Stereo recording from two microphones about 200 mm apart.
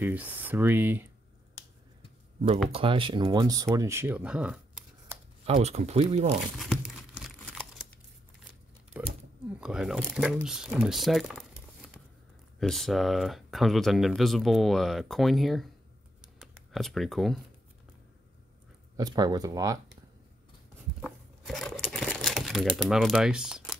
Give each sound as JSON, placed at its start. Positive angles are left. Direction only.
{"t": 0.0, "sound": "speech", "side_deg": -10}
{"t": 2.7, "sound": "speech", "side_deg": -25}
{"t": 5.4, "sound": "speech", "side_deg": -30}
{"t": 6.6, "sound": "crumpling", "side_deg": 0}
{"t": 9.0, "sound": "a sound", "side_deg": -5}
{"t": 9.6, "sound": "speech", "side_deg": -5}
{"t": 16.7, "sound": "speech", "side_deg": 0}
{"t": 18.9, "sound": "speech", "side_deg": -20}
{"t": 21.0, "sound": "crumpling", "side_deg": 0}